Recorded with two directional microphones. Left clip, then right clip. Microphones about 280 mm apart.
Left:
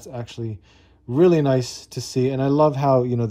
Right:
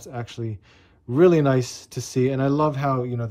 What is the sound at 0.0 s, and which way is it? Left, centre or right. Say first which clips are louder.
Speech: left 1 dB; centre.